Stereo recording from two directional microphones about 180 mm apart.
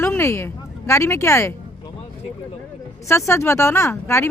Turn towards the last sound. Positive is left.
turn(degrees=15)  # may be behind; listen again after turning